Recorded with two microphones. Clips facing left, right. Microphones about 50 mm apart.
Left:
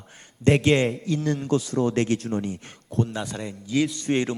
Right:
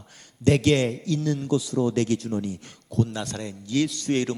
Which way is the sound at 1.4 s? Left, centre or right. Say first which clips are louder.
Even; left.